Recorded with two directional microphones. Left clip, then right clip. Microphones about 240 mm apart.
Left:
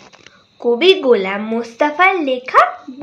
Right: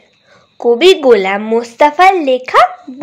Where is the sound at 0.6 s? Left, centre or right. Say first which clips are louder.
Right 4 dB; right.